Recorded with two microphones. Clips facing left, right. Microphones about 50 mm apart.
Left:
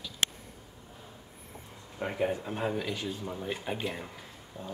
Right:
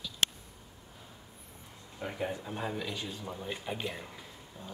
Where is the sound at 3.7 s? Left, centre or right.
Centre.